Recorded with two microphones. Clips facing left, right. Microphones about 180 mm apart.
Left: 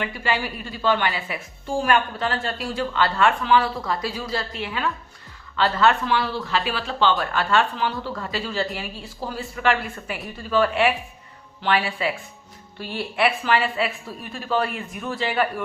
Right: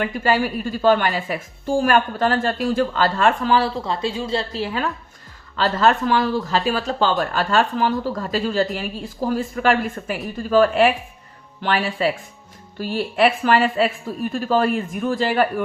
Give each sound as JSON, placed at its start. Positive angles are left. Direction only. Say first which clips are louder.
{"t": 0.0, "sound": "speech", "louder": "right 6 dB", "side_deg": -45}